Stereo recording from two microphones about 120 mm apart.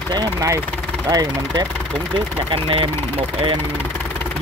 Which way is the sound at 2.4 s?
45° right (ahead or behind).